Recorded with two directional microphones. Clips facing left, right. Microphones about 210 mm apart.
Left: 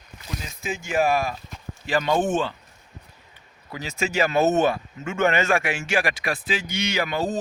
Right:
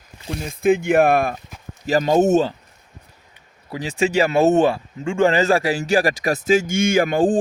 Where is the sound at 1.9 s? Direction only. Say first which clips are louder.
Right 7 dB; 40° right (ahead or behind).